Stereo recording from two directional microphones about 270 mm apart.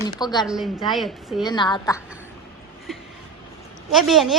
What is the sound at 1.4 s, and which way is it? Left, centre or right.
Speech, centre.